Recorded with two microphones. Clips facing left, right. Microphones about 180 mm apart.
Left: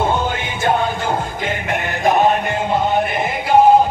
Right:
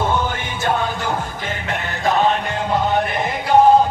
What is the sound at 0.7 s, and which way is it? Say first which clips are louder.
Music: left 3 dB; 50° left (ahead or behind).